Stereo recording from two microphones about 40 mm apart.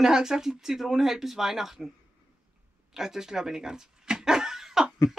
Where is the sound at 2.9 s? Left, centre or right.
Centre.